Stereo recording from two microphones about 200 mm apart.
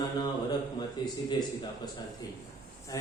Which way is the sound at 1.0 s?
20° left (ahead or behind).